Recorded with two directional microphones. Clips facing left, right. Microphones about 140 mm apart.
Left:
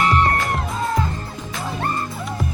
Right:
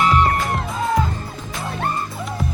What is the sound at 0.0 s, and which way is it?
Music, centre (ahead or behind).